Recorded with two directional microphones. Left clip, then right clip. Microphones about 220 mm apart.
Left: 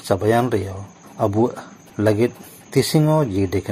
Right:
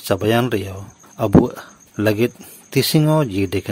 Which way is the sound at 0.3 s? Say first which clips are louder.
Even; 55° right (ahead or behind).